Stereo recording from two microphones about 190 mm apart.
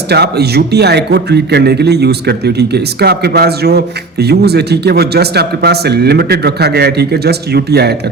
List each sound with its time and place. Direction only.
0.1 s a man's voice: 60° right (ahead or behind)